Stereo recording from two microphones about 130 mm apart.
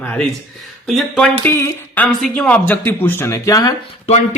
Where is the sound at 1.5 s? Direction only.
20° left (ahead or behind).